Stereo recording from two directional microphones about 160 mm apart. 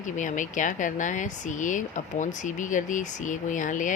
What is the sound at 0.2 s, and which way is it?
Speech, 50° left (ahead or behind).